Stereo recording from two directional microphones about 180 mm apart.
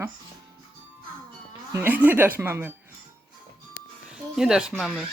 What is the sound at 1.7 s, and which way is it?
Speech, 10° right (ahead or behind).